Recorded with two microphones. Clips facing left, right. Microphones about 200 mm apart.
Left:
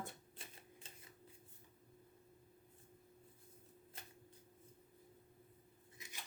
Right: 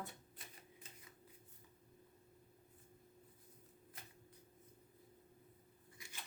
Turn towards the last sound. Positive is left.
turn(degrees=20)  # may be behind; listen again after turning